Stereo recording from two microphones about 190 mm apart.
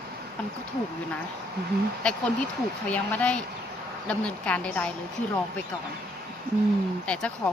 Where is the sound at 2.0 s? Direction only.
5° left (ahead or behind).